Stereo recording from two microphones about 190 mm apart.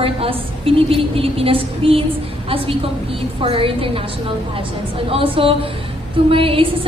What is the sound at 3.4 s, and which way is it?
Speech, 30° right (ahead or behind).